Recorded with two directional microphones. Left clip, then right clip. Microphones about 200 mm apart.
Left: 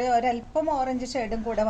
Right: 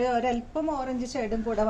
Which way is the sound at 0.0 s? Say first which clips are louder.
Left 2 dB; 35° left (ahead or behind).